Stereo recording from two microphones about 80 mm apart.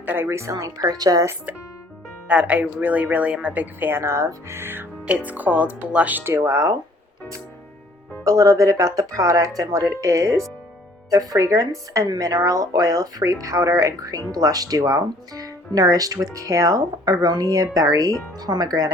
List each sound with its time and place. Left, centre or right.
0.0 s speech: right
0.3 s speech: right
2.2 s speech: centre
5.0 s speech: centre
6.3 s speech: right
8.2 s speech: right
12.0 s speech: right